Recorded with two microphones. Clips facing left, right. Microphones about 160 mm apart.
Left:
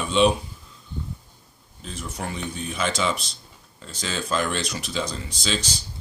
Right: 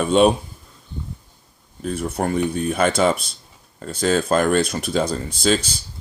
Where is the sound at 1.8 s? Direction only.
55° right (ahead or behind).